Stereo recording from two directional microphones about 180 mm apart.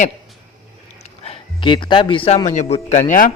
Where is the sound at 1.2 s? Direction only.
30° left (ahead or behind).